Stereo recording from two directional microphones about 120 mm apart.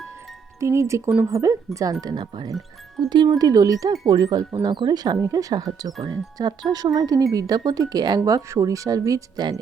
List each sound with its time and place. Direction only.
0.6 s speech: 25° right (ahead or behind)